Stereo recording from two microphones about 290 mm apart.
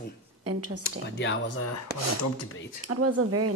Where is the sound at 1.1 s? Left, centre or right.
Left.